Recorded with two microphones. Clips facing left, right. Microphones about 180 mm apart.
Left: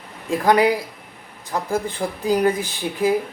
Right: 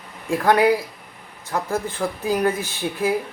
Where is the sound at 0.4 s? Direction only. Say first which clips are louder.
Left 1 dB; 15° left (ahead or behind).